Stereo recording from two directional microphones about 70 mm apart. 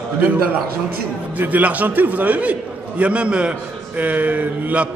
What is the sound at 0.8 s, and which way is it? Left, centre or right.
A man's voice, right.